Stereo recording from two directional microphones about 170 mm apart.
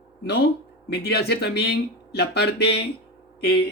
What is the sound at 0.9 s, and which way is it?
Speech, 70° left (ahead or behind).